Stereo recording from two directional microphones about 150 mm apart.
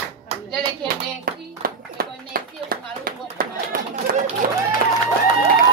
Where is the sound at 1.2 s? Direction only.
75° right (ahead or behind).